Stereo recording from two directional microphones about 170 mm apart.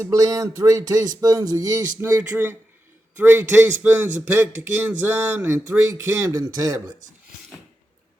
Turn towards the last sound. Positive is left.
turn(degrees=-20)  # may be behind; listen again after turning